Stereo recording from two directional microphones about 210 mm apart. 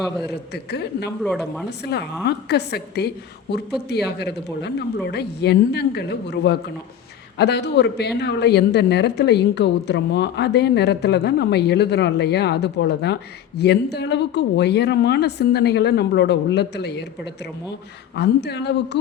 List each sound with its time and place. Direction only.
0.0 s speech: centre (ahead or behind)
0.5 s a woman's voice: 50° left (ahead or behind)
1.2 s speech: centre (ahead or behind)
1.8 s a woman's voice: 50° left (ahead or behind)
18.1 s a woman's voice: 55° left (ahead or behind)